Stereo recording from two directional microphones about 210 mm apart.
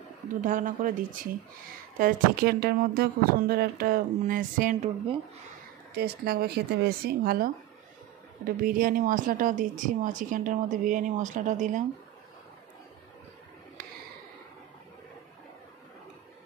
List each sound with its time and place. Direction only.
0.4 s speech: 40° right (ahead or behind)
5.9 s speech: 50° right (ahead or behind)